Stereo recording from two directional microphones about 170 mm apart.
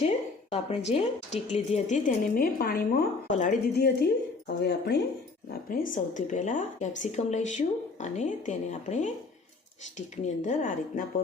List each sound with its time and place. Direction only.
0.0 s a sound: 40° left (ahead or behind)
0.9 s speech: 40° left (ahead or behind); by 3.1 s 65° left (ahead or behind)
3.2 s speech: 45° left (ahead or behind)
3.8 s speech: 65° left (ahead or behind)
5.7 s speech: 55° left (ahead or behind)